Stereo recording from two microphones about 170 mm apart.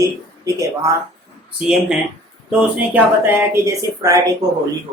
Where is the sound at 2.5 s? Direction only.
10° right (ahead or behind).